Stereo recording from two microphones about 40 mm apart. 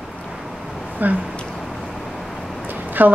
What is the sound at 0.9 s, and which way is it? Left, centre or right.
Speech, right.